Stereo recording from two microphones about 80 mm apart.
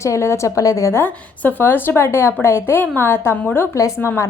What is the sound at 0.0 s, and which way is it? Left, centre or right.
A woman's voice, left.